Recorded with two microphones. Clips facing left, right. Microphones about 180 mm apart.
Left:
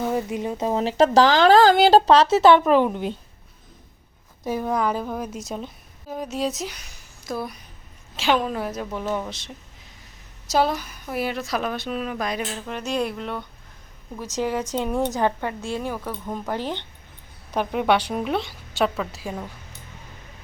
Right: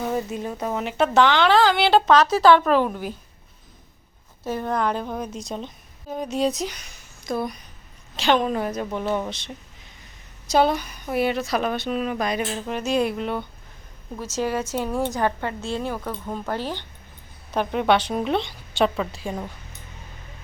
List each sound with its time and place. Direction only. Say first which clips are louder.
0.0 s speech: left 1 dB; 15° left (ahead or behind)
4.4 s a woman's voice: left 1 dB; 10° left (ahead or behind)
10.5 s a woman's voice: right 2 dB; centre (ahead or behind)
14.2 s a woman's voice: even; 15° left (ahead or behind)